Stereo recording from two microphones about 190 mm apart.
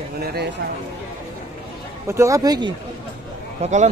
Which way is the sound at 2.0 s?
15° right (ahead or behind).